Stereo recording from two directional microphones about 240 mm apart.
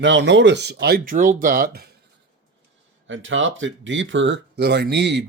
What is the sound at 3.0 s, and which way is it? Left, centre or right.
Speech, right.